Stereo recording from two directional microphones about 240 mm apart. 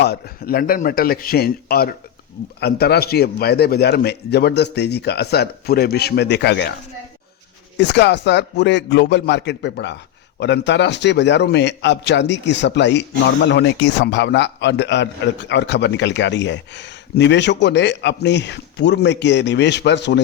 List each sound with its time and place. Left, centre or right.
0.0 s a man's voice: left
7.8 s a man's voice: left